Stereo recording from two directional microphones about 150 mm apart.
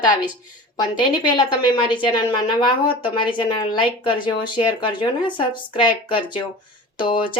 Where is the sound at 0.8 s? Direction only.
30° left (ahead or behind).